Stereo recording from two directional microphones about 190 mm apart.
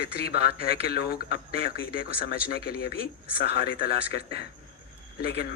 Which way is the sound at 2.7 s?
55° left (ahead or behind).